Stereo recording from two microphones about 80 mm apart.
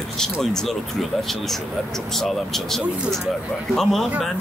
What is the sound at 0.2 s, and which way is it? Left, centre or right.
Speech, centre.